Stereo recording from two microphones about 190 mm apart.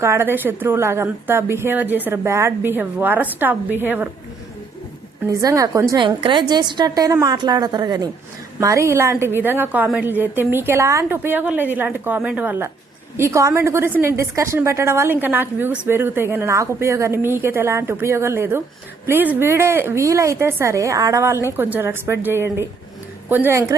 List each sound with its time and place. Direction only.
0.0 s a woman's voice: 15° right (ahead or behind)
5.3 s a woman's voice: 15° right (ahead or behind)